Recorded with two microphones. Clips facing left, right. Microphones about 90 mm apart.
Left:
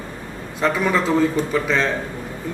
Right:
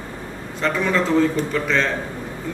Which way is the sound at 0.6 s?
10° left (ahead or behind).